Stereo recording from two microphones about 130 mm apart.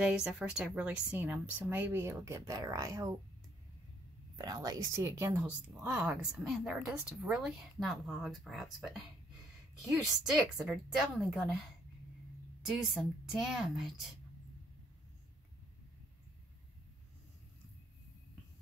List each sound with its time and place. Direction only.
0.0 s speech: 5° right (ahead or behind); by 3.2 s 25° right (ahead or behind)
4.4 s a woman's voice: 30° right (ahead or behind); by 9.0 s centre (ahead or behind)
10.2 s a woman's voice: 5° right (ahead or behind)
12.6 s a woman's voice: 5° right (ahead or behind)